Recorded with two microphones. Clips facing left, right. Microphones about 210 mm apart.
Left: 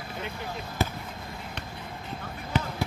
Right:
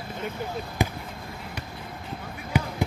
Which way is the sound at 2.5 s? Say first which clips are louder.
Right 3 dB; 10° right (ahead or behind).